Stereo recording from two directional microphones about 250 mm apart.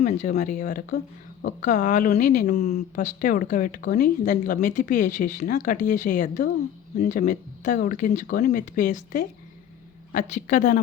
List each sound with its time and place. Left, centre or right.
0.0 s a woman's voice: left